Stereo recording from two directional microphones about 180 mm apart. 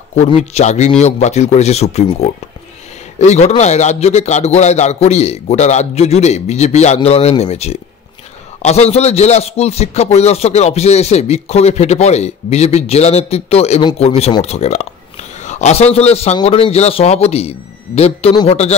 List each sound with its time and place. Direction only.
0.1 s speech: 40° left (ahead or behind)
18.3 s speech: 25° left (ahead or behind)